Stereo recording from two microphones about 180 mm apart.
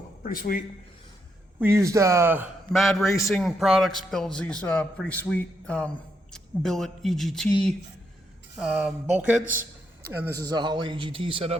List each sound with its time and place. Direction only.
0.2 s speech: 50° left (ahead or behind)
1.5 s speech: 15° right (ahead or behind)
2.7 s a man's voice: centre (ahead or behind)
8.5 s a man's voice: centre (ahead or behind); by 11.5 s 30° right (ahead or behind)